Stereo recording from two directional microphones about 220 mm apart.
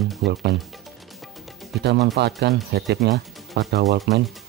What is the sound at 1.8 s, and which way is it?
Speech, 50° right (ahead or behind).